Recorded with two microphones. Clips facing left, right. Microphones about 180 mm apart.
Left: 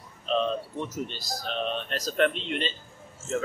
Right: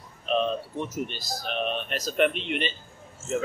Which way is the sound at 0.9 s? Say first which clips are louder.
Right 2 dB; 15° right (ahead or behind).